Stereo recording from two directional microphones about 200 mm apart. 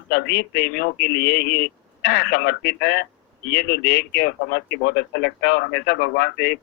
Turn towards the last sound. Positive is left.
turn(degrees=55)  # may be behind; listen again after turning